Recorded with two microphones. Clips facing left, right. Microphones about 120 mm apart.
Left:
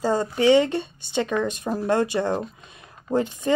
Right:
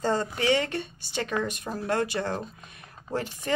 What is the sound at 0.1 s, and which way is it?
Speech, 25° left (ahead or behind).